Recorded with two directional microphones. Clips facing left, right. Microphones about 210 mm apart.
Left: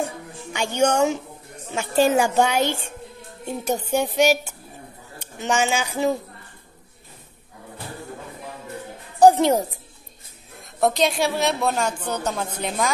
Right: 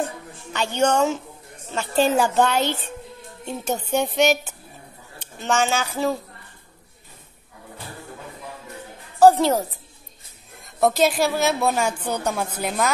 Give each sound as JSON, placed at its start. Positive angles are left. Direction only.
{"t": 0.5, "sound": "a woman's voice", "side_deg": 10}
{"t": 9.2, "sound": "a woman's voice", "side_deg": 15}
{"t": 10.6, "sound": "speech", "side_deg": 0}